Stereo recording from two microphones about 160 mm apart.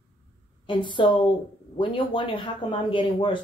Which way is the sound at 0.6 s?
30° left (ahead or behind).